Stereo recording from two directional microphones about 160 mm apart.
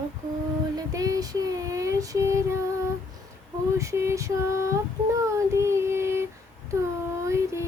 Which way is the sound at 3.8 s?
20° right (ahead or behind).